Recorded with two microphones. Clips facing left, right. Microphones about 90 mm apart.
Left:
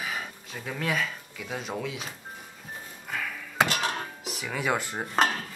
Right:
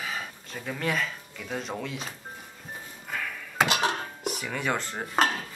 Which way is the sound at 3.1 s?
Centre (ahead or behind).